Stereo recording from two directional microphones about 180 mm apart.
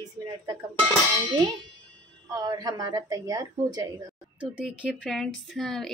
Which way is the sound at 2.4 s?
20° right (ahead or behind).